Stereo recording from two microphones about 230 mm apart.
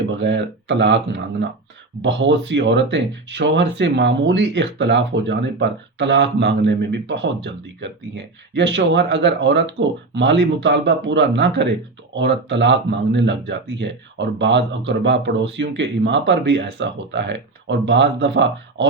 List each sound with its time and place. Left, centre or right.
0.2 s speech: right